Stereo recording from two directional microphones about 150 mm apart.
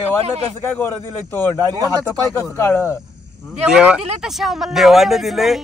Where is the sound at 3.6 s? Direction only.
5° right (ahead or behind).